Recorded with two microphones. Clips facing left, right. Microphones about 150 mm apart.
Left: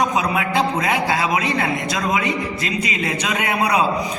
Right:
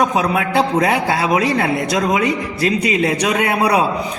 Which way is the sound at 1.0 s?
55° right (ahead or behind).